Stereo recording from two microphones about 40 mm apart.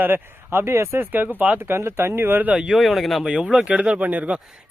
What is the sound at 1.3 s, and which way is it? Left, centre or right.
Speech, right.